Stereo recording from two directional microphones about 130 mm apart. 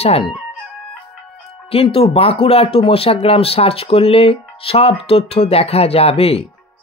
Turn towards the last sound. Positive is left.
turn(degrees=50)  # may be behind; listen again after turning